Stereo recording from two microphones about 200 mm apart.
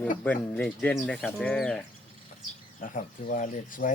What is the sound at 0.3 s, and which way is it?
Speech, 5° left (ahead or behind).